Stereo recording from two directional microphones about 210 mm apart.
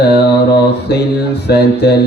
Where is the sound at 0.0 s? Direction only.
50° left (ahead or behind).